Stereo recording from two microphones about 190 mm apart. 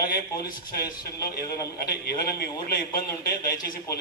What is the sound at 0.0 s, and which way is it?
A man's voice, 50° left (ahead or behind).